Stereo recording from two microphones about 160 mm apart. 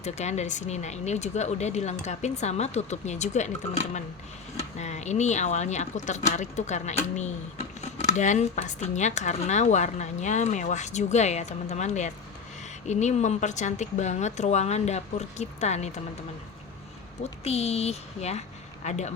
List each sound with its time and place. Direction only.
0.0 s speech: 45° left (ahead or behind)
8.0 s speech: 50° left (ahead or behind)
17.4 s speech: 40° left (ahead or behind)